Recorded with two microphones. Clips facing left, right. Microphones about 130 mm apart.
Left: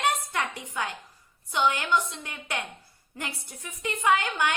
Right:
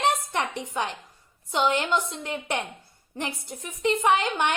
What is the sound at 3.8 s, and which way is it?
Speech, 25° right (ahead or behind).